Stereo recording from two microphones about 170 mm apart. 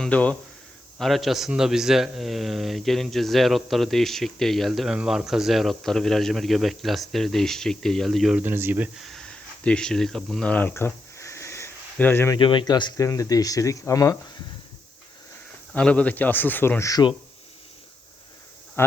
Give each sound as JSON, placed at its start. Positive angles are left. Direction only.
{"t": 0.0, "sound": "a man's voice", "side_deg": 5}
{"t": 9.0, "sound": "a sound", "side_deg": 5}
{"t": 12.4, "sound": "speech", "side_deg": 30}
{"t": 15.7, "sound": "a man's voice", "side_deg": 5}
{"t": 18.8, "sound": "speech", "side_deg": 15}